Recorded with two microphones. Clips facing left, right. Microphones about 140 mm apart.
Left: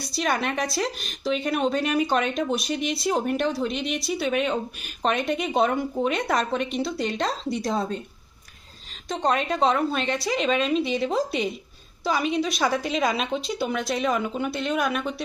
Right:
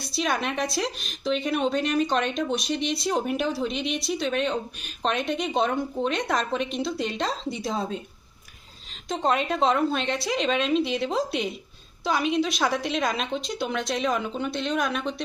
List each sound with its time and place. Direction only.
0.0 s a woman's voice: centre (ahead or behind)
9.0 s a woman's voice: centre (ahead or behind)